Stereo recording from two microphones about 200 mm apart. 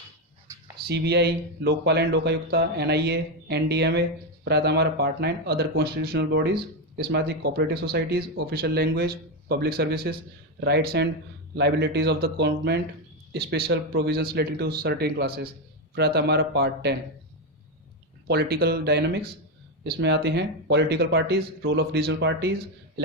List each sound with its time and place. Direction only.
0.9 s speech: 55° right (ahead or behind)
18.3 s speech: 50° right (ahead or behind)